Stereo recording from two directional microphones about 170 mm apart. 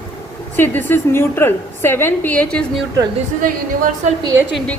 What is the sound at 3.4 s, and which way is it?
Speech, 50° right (ahead or behind).